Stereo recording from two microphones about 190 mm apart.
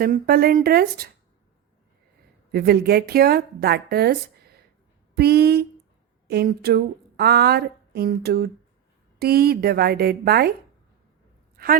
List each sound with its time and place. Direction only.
0.0 s speech: 50° right (ahead or behind)
2.5 s a woman's voice: 55° right (ahead or behind)
11.5 s a sound: 50° right (ahead or behind)